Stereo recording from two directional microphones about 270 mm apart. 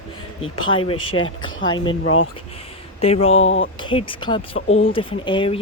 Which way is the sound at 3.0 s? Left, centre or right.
Left.